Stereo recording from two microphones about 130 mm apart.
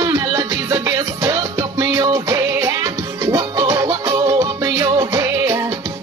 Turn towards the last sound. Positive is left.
turn(degrees=-25)  # may be behind; listen again after turning